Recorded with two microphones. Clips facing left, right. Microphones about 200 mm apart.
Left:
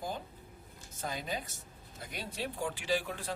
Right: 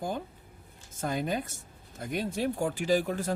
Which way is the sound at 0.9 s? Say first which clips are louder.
Right 8 dB; 55° right (ahead or behind).